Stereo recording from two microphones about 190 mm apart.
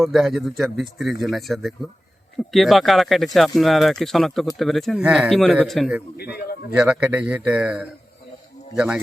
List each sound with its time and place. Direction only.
0.0 s speech: centre (ahead or behind)
6.1 s a man's voice: 55° left (ahead or behind)
6.7 s speech: 5° right (ahead or behind)